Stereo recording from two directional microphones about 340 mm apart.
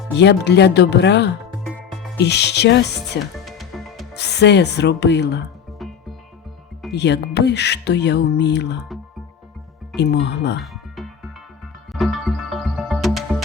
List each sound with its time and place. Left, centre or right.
0.2 s speech: left
3.4 s music: centre
4.1 s speech: left
5.8 s music: centre
6.9 s speech: left
9.9 s speech: left
10.6 s music: centre